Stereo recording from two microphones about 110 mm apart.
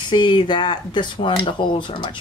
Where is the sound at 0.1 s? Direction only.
45° left (ahead or behind).